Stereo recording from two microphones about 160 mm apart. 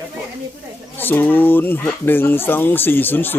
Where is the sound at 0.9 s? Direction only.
10° left (ahead or behind).